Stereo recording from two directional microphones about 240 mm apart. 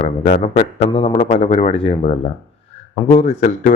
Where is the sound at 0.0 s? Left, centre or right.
Left.